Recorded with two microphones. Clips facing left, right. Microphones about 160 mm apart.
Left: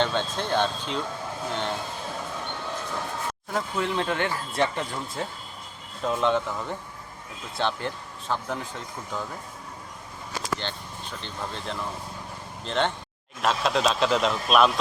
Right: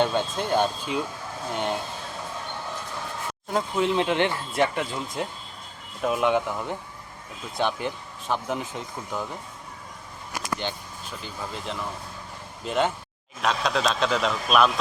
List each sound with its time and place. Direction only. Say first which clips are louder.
0.0 s speech: right 2 dB; 10° right (ahead or behind)
3.5 s speech: right 4 dB; 20° right (ahead or behind)
10.3 s speech: right 1 dB; 10° right (ahead or behind)